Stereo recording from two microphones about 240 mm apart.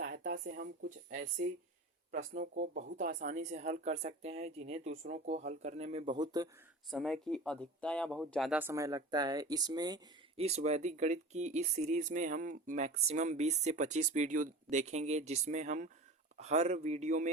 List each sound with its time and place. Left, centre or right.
0.0 s a sound: right
0.3 s speech: right; by 6.5 s centre
6.9 s speech: centre; by 17.2 s right